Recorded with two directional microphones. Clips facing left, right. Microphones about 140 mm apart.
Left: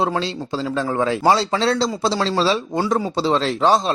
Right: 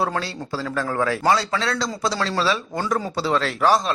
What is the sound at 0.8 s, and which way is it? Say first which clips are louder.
A man's voice: left 2 dB; 20° left (ahead or behind).